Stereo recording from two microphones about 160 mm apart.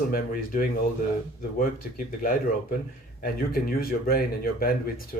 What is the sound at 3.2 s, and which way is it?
Speech, 65° left (ahead or behind).